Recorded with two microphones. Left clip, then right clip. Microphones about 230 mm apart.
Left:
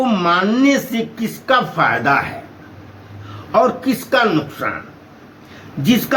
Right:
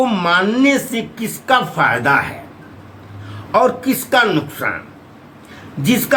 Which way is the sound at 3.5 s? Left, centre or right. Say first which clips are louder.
Right 1 dB; centre.